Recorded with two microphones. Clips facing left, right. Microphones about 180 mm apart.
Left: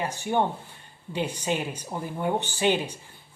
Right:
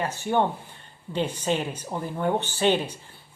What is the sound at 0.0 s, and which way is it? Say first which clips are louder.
A woman's voice: right 2 dB; 15° left (ahead or behind).